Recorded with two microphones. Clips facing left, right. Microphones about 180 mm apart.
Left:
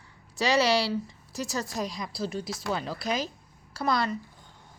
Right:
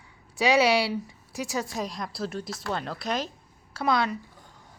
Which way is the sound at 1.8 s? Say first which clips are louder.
Even; centre (ahead or behind).